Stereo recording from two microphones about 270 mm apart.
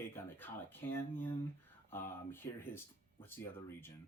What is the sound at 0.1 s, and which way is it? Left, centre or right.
Speech, centre.